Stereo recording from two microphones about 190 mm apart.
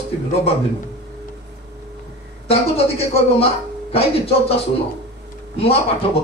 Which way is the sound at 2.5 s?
30° left (ahead or behind).